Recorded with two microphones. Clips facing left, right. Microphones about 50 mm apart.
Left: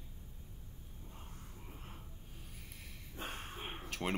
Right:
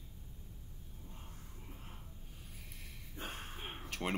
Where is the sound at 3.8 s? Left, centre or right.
Centre.